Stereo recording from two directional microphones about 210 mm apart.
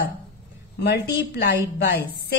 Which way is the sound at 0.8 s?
50° left (ahead or behind).